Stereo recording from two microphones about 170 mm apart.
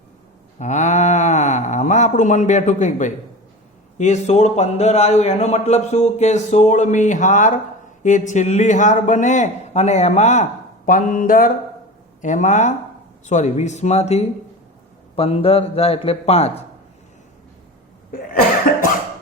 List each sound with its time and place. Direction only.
0.6 s a man's voice: 45° left (ahead or behind)